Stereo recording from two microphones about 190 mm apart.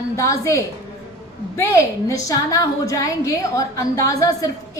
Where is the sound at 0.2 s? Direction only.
15° left (ahead or behind).